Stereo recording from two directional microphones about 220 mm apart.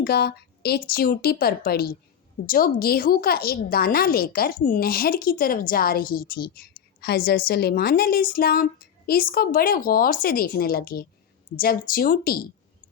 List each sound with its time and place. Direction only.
0.0 s a woman's voice: 45° left (ahead or behind)